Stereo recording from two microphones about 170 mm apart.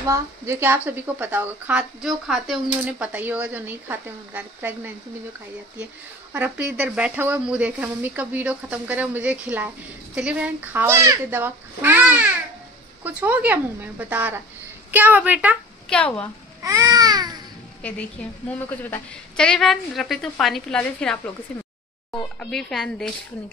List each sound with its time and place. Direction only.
0.0 s a woman's voice: 15° right (ahead or behind)
6.3 s a woman's voice: 10° right (ahead or behind)
15.9 s speech: 5° left (ahead or behind)
16.6 s babbling: 20° right (ahead or behind)
18.2 s a woman's voice: 10° left (ahead or behind)